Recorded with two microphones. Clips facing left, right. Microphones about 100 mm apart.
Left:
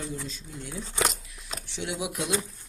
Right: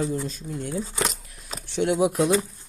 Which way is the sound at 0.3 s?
50° right (ahead or behind).